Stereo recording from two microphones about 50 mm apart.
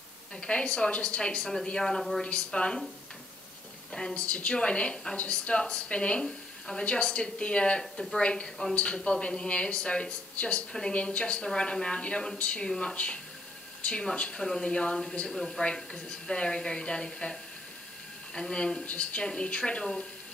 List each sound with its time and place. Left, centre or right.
0.4 s a woman's voice: left
1.8 s a woman's voice: centre
2.2 s a woman's voice: left
3.9 s a woman's voice: centre
7.8 s a woman's voice: centre
8.2 s a woman's voice: left
15.2 s a woman's voice: centre